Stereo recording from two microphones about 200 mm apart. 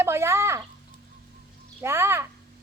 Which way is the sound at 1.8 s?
10° right (ahead or behind).